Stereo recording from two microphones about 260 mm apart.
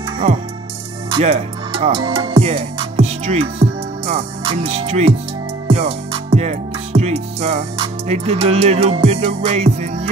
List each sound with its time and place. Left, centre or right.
1.1 s speech: right
5.7 s music: right